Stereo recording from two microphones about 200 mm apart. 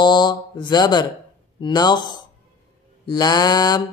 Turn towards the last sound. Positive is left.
turn(degrees=20)  # may be behind; listen again after turning